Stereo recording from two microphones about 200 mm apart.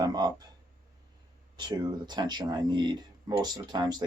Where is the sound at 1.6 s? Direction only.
20° right (ahead or behind).